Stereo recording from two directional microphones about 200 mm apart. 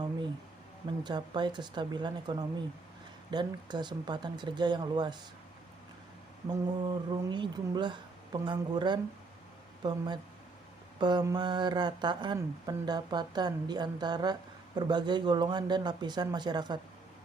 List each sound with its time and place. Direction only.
1.0 s speech: 20° right (ahead or behind)
6.5 s speech: 20° right (ahead or behind)
11.0 s speech: 20° right (ahead or behind)